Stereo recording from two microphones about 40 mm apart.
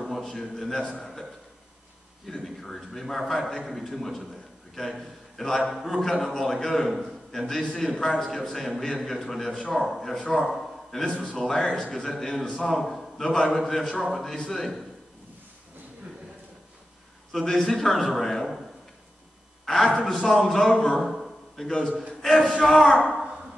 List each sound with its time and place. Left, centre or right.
0.0 s a sound: centre
2.2 s a man's voice: centre
13.2 s a man's voice: centre
17.5 s a man's voice: centre
19.6 s a man's voice: centre
19.9 s a man's voice: centre
21.1 s a sound: centre
21.6 s a man's voice: centre